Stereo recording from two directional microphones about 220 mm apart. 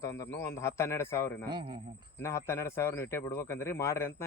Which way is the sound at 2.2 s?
10° left (ahead or behind).